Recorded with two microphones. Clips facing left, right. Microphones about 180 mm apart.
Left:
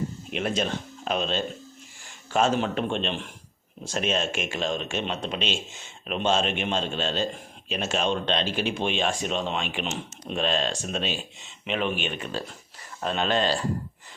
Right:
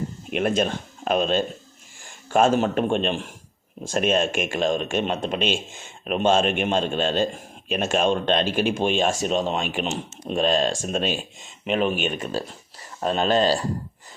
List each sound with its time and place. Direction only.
0.3 s a man's voice: 55° right (ahead or behind)